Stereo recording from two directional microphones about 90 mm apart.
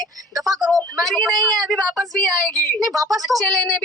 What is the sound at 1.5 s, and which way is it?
Speech, 40° right (ahead or behind).